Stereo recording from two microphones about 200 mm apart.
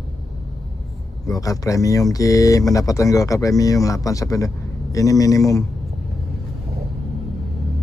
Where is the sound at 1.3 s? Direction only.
15° left (ahead or behind).